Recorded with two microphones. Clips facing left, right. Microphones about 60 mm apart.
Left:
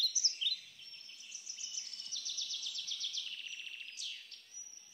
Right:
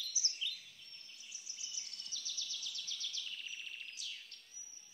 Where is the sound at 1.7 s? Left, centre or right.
Right.